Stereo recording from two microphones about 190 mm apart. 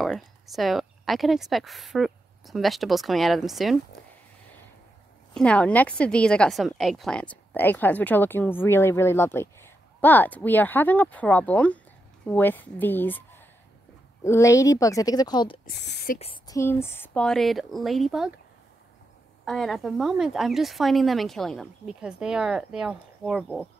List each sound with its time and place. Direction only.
0.0 s speech: centre (ahead or behind)
5.3 s a woman's voice: 5° left (ahead or behind); by 15.5 s 20° left (ahead or behind)
15.6 s speech: 60° left (ahead or behind)
16.4 s speech: 15° left (ahead or behind); by 18.3 s centre (ahead or behind)
19.4 s speech: centre (ahead or behind)